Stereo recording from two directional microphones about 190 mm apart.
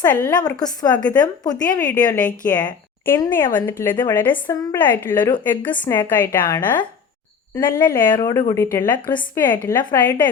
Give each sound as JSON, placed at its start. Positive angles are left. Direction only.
{"t": 0.0, "sound": "a woman's voice", "side_deg": 15}
{"t": 4.3, "sound": "a woman's voice", "side_deg": 25}
{"t": 4.7, "sound": "speech", "side_deg": 10}